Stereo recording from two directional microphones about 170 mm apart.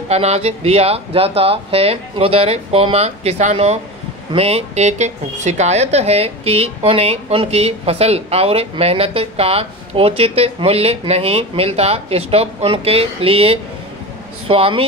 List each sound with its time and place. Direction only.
0.1 s a woman's voice: 40° right (ahead or behind)